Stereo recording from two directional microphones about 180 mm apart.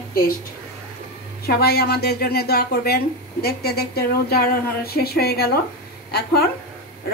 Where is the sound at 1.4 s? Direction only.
60° left (ahead or behind).